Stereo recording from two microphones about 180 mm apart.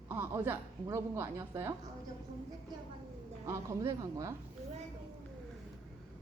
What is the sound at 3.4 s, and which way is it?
Speech, 15° right (ahead or behind).